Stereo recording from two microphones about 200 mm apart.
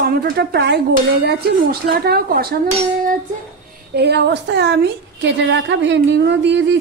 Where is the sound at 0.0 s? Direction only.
50° right (ahead or behind).